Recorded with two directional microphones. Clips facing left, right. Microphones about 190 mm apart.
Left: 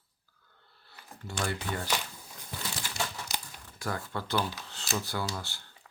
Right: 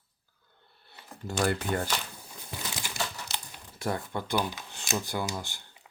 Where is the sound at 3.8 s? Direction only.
20° right (ahead or behind).